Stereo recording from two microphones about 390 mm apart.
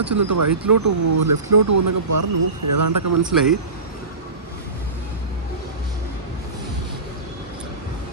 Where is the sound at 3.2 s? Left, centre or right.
Centre.